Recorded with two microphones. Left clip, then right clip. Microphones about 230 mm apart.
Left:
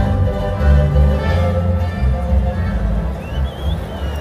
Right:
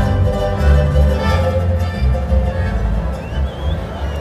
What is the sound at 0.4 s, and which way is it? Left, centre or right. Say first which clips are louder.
Music: right 2 dB; right.